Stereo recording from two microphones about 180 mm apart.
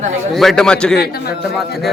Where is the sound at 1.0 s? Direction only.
60° left (ahead or behind).